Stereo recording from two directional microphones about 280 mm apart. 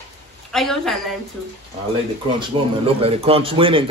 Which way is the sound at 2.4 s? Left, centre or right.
Centre.